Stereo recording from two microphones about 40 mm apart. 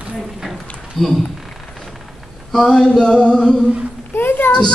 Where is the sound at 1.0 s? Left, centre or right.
Centre.